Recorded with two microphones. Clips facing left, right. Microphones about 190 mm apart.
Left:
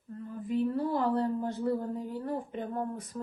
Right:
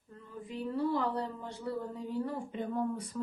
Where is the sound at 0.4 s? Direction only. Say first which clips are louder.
Left 4 dB; 50° left (ahead or behind).